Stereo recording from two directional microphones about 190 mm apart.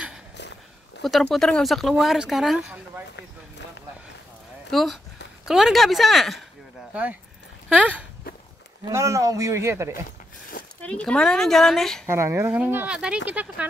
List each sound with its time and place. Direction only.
0.4 s a sound: 65° left (ahead or behind)
1.0 s speech: centre (ahead or behind)
4.6 s speech: centre (ahead or behind)
8.8 s speech: 15° right (ahead or behind)
10.8 s speech: 5° left (ahead or behind)
12.1 s speech: 15° right (ahead or behind)